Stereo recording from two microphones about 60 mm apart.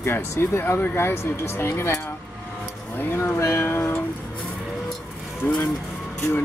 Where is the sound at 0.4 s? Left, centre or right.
Left.